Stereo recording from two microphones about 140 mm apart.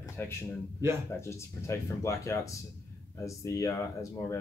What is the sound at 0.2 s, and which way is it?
A man's voice, 15° left (ahead or behind).